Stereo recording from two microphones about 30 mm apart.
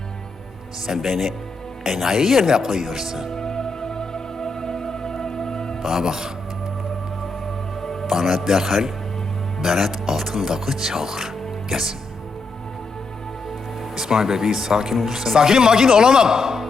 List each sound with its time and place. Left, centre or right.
1.0 s speech: centre
3.3 s music: left
5.8 s speech: centre
8.0 s speech: centre
13.9 s speech: centre